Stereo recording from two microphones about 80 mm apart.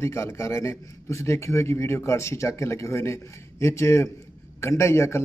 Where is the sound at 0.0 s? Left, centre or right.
Left.